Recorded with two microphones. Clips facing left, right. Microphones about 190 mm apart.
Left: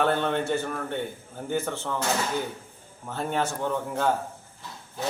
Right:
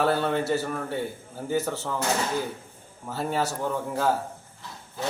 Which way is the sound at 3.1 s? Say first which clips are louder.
Right 1 dB; 5° right (ahead or behind).